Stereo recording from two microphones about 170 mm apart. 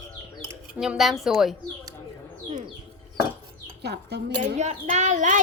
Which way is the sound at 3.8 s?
80° right.